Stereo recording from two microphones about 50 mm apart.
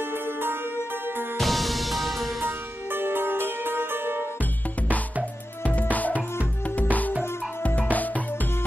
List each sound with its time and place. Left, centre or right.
1.4 s music: centre
2.4 s music: right
5.8 s music: left